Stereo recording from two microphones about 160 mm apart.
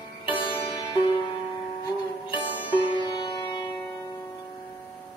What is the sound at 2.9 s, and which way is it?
Music, 30° left (ahead or behind).